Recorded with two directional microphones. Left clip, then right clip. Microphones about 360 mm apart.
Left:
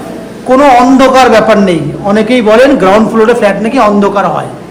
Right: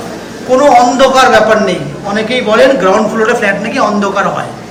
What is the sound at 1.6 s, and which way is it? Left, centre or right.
Speech, centre.